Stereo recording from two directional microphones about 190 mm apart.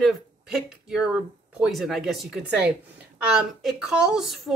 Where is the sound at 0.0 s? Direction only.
5° right (ahead or behind).